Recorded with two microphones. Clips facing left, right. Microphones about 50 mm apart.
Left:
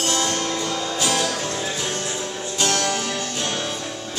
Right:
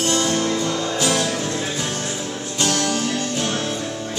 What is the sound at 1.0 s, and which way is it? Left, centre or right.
Music, right.